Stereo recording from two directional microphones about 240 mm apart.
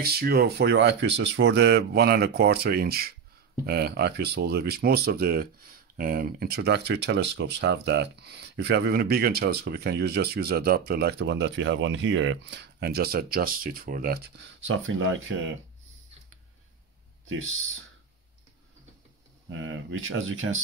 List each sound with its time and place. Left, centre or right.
0.0 s speech: right
19.6 s speech: right